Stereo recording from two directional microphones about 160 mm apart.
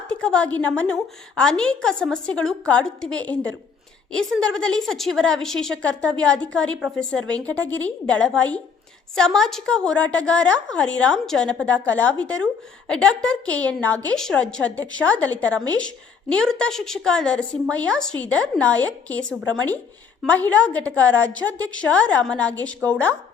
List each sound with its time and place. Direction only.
0.1 s a woman's voice: 5° left (ahead or behind)
11.9 s speech: 25° right (ahead or behind)
12.2 s a woman's voice: 10° left (ahead or behind)
15.5 s speech: 25° right (ahead or behind)
16.3 s a woman's voice: 5° left (ahead or behind)
19.4 s speech: 20° right (ahead or behind)
20.2 s a woman's voice: 10° left (ahead or behind)